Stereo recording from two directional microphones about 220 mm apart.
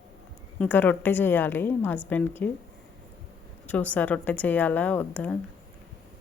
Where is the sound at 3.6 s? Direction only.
5° left (ahead or behind).